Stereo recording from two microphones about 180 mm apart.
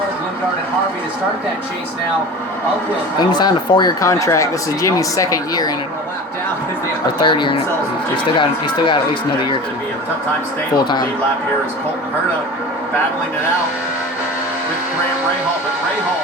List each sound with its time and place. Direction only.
3.2 s speech: 25° left (ahead or behind)
7.2 s speech: 25° left (ahead or behind)
10.8 s speech: 25° left (ahead or behind)